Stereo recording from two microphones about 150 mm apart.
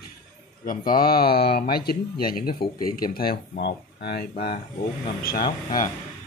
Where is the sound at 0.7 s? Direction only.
70° left (ahead or behind).